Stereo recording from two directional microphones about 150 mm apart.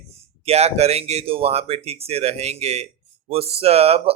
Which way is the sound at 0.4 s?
45° right (ahead or behind).